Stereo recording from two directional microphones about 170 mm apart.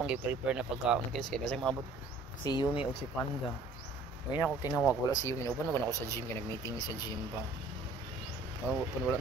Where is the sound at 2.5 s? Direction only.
20° left (ahead or behind).